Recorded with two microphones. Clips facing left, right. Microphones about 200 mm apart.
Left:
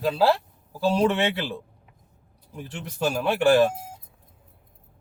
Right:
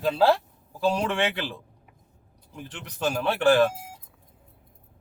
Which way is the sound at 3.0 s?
5° left (ahead or behind).